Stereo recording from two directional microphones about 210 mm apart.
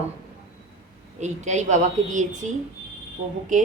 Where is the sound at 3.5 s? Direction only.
35° right (ahead or behind).